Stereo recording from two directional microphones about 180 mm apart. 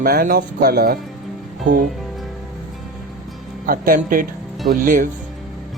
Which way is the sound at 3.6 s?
50° right (ahead or behind).